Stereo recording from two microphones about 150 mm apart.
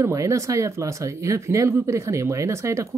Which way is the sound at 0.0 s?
20° right (ahead or behind).